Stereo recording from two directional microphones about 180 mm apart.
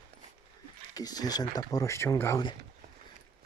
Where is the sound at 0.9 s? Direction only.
20° left (ahead or behind).